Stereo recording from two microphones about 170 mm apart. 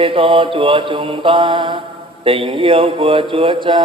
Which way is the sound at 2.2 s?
35° right (ahead or behind).